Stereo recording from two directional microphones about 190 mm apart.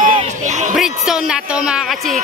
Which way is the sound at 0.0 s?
40° right (ahead or behind).